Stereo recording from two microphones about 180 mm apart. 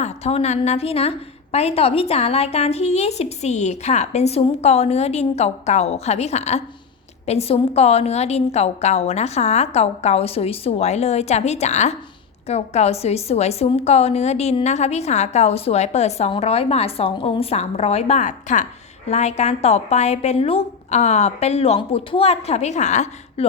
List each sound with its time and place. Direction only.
0.0 s a woman's voice: 35° left (ahead or behind)